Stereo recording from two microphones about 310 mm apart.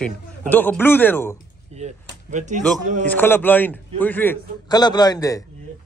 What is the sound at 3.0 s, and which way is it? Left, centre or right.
A man's voice, centre.